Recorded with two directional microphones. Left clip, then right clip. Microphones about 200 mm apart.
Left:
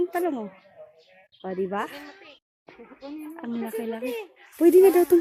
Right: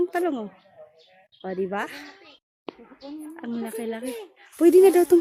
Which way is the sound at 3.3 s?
Centre (ahead or behind).